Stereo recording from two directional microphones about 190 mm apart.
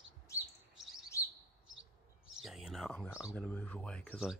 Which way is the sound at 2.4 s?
Centre (ahead or behind).